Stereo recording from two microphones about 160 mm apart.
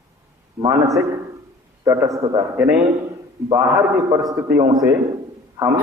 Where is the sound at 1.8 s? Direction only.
20° right (ahead or behind).